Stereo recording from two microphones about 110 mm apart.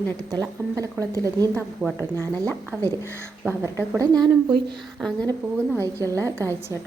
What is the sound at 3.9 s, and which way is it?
Speech, 40° right (ahead or behind).